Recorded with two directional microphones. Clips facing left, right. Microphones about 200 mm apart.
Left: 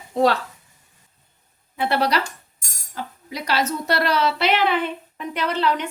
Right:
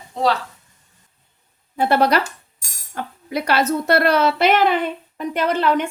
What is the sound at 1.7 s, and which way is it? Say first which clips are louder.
Speech: right 4 dB; 45° right (ahead or behind).